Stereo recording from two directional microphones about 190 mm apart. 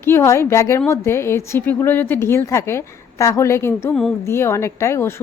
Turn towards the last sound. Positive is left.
turn(degrees=15)  # may be behind; listen again after turning